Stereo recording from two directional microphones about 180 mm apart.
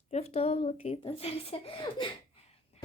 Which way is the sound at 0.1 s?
35° left (ahead or behind).